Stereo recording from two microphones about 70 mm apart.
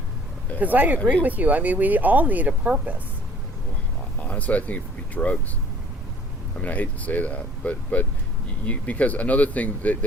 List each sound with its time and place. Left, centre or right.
0.6 s speech: right
4.2 s speech: left
6.6 s speech: left